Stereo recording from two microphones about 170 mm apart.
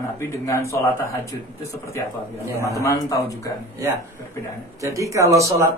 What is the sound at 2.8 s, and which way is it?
Speech, 20° left (ahead or behind).